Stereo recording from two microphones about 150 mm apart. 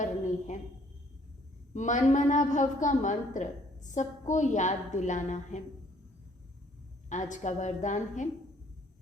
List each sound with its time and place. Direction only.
0.0 s a sound: 55° left (ahead or behind)
1.7 s a woman's voice: 55° left (ahead or behind)
7.1 s a woman's voice: 55° left (ahead or behind)